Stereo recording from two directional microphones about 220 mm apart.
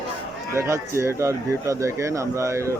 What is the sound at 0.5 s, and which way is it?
Speech, 10° right (ahead or behind).